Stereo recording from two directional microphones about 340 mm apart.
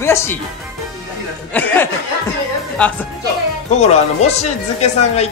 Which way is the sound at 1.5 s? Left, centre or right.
Centre.